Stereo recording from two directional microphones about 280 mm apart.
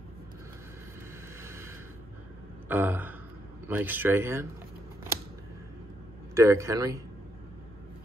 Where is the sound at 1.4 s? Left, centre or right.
Centre.